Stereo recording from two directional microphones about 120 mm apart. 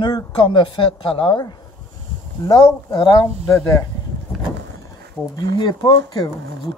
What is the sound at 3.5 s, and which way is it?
Speech, 25° left (ahead or behind).